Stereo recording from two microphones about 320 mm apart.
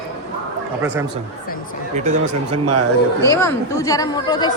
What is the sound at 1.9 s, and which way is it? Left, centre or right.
Speech, right.